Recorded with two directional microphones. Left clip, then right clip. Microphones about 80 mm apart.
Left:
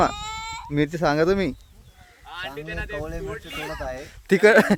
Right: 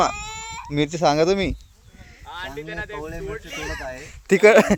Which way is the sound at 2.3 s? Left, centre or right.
Left.